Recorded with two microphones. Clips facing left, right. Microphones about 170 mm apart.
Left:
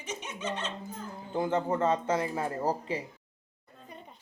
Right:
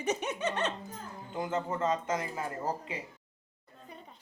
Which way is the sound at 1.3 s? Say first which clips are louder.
Left 5 dB; 30° left (ahead or behind).